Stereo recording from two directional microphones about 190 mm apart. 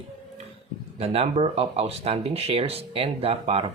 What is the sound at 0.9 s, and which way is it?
Speech, 30° right (ahead or behind).